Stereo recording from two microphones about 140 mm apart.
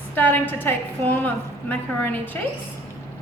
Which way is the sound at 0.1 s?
15° left (ahead or behind).